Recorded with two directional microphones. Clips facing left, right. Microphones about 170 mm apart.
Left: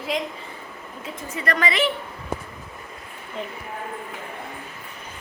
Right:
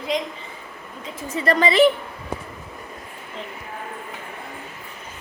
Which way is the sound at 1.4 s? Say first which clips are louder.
Right 5 dB; 30° right (ahead or behind).